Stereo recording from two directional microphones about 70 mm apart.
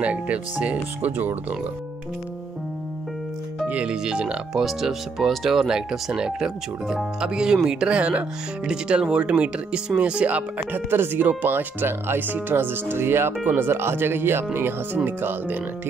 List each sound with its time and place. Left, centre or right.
0.0 s speech: centre
3.6 s speech: centre